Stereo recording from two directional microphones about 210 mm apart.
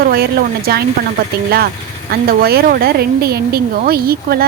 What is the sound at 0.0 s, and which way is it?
Speech, 45° right (ahead or behind).